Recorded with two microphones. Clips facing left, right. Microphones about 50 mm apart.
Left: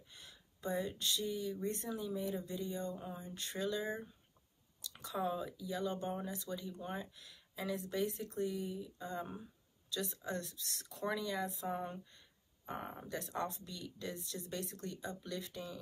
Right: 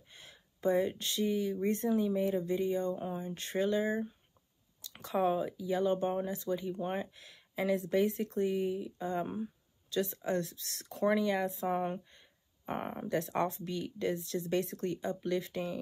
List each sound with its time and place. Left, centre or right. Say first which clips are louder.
0.1 s speech: right 4 dB; right